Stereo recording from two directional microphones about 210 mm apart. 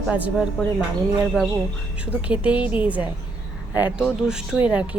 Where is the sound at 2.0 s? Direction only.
5° right (ahead or behind).